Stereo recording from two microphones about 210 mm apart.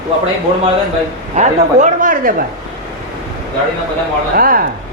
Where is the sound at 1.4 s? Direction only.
35° right (ahead or behind).